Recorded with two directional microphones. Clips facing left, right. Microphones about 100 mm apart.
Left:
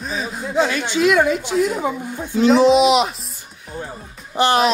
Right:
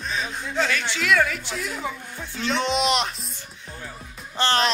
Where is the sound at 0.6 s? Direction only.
20° left (ahead or behind); by 3.1 s 5° left (ahead or behind).